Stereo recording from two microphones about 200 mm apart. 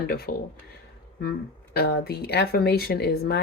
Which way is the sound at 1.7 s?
50° left (ahead or behind).